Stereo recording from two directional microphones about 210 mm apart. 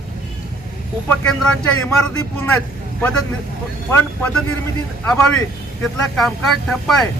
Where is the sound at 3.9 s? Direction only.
10° left (ahead or behind).